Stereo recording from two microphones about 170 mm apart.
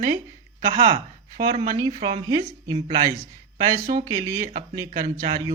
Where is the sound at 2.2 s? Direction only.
25° right (ahead or behind).